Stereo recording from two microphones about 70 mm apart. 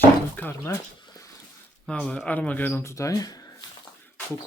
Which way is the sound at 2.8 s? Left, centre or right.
Left.